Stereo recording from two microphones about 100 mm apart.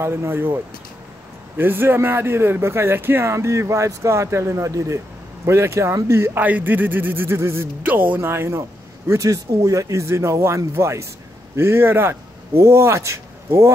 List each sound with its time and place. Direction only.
0.0 s speech: 25° right (ahead or behind)
1.6 s a man's voice: 20° right (ahead or behind)